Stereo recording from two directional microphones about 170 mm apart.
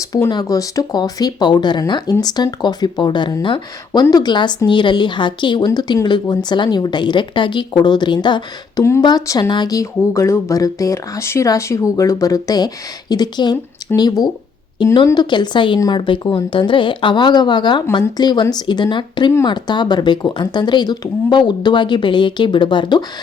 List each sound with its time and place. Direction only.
0.0 s speech: 20° left (ahead or behind)